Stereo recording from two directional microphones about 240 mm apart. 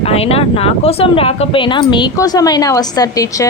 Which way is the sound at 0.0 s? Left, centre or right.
Left.